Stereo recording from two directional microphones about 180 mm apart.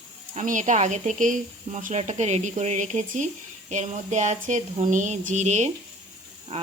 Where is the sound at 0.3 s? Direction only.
40° right (ahead or behind).